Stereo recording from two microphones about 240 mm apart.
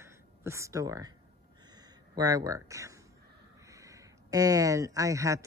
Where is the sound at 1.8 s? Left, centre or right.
Centre.